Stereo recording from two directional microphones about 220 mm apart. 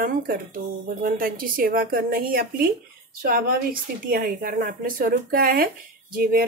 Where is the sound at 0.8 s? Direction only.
40° right (ahead or behind).